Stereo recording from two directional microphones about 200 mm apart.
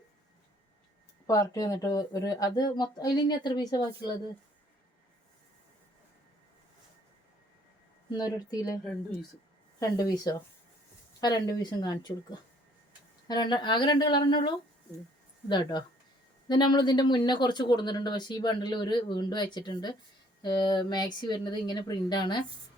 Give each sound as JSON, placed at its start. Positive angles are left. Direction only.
{"t": 1.3, "sound": "speech", "side_deg": 20}
{"t": 8.1, "sound": "speech", "side_deg": 20}
{"t": 9.8, "sound": "speech", "side_deg": 20}